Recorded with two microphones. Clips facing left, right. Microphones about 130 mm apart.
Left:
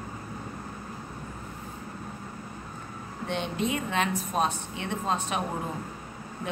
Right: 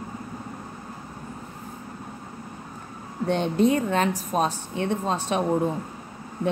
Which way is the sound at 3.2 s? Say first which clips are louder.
Right 9 dB; 40° right (ahead or behind).